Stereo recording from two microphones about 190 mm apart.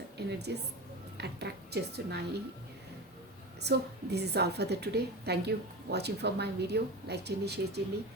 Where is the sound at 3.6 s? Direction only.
60° right (ahead or behind).